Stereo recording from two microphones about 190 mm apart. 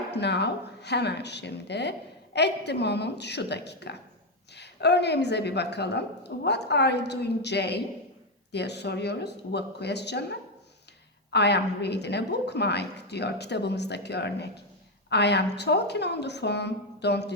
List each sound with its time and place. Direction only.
0.1 s a woman's voice: 60° left (ahead or behind)